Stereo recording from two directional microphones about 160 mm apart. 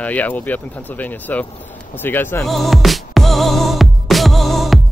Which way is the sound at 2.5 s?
Centre (ahead or behind).